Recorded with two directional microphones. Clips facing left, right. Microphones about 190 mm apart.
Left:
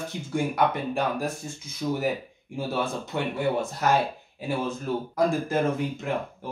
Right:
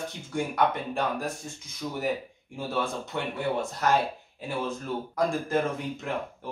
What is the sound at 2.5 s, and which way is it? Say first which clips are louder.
Speech: left 2 dB; 5° left (ahead or behind).